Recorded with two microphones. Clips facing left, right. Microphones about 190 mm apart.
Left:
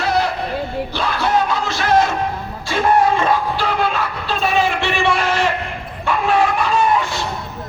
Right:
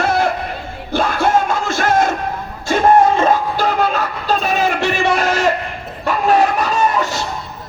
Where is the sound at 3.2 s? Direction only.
40° right (ahead or behind).